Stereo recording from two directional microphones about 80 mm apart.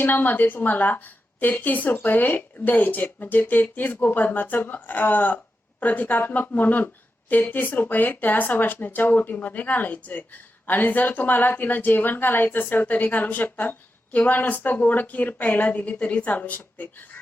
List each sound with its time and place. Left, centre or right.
0.0 s a woman's voice: left